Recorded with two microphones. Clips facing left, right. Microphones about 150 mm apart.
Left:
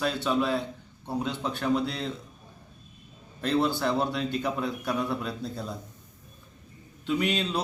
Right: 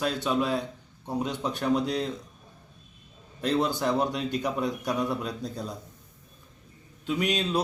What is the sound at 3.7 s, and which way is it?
Speech, 15° right (ahead or behind).